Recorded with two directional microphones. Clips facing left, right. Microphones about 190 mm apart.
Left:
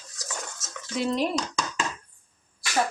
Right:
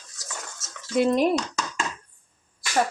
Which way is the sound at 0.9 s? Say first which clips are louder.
Right 6 dB; 55° right (ahead or behind).